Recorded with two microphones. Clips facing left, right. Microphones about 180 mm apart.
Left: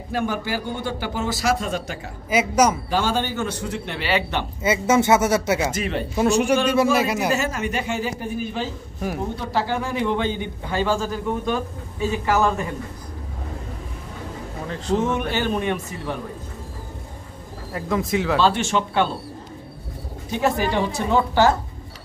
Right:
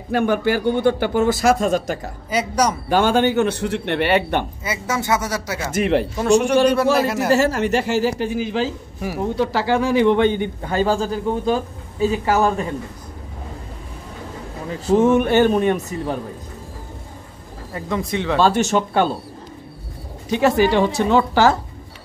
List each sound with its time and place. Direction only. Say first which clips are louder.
0.1 s speech: right 7 dB; 60° right (ahead or behind); by 2.0 s 45° right (ahead or behind)
2.2 s speech: left 1 dB; 5° left (ahead or behind)
2.9 s speech: right 6 dB; 60° right (ahead or behind)
4.6 s speech: left 9 dB; 25° left (ahead or behind)
5.7 s speech: right 7 dB; 65° right (ahead or behind)
6.4 s a man's voice: right 3 dB; 5° left (ahead or behind)
7.3 s a woman's voice: right 7 dB; 70° right (ahead or behind)
10.7 s a man's voice: right 3 dB; 40° right (ahead or behind)
15.0 s speech: right 10 dB; 50° right (ahead or behind)
17.7 s a man's voice: left 1 dB; centre (ahead or behind)
18.4 s speech: right 3 dB; 45° right (ahead or behind)
20.2 s a woman's voice: right 6 dB; 90° right